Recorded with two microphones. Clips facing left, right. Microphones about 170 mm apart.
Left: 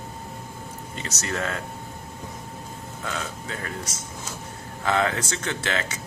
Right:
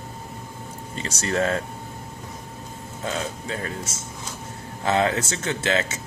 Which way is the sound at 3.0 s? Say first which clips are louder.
Right 4 dB; 25° right (ahead or behind).